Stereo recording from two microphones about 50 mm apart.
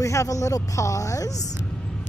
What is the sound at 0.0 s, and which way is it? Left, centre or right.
Speech, left.